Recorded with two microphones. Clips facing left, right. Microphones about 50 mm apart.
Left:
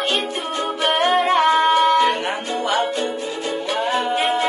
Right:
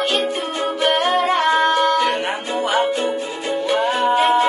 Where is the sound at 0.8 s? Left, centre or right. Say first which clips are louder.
Even; centre.